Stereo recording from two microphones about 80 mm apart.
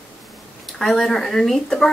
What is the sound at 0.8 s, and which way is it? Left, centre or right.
Speech, centre.